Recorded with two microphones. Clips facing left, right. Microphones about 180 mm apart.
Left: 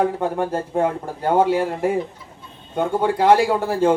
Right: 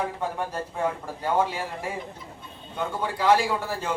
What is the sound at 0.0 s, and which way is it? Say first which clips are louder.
A man's voice: left 8 dB; 55° left (ahead or behind).